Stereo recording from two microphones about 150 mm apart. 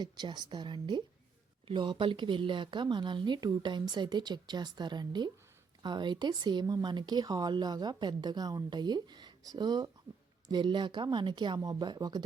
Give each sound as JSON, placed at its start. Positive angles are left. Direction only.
{"t": 0.0, "sound": "speech", "side_deg": -30}